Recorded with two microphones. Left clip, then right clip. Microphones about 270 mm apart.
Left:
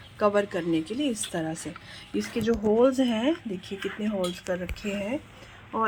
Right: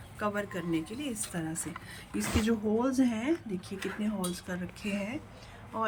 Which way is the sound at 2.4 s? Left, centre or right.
Centre.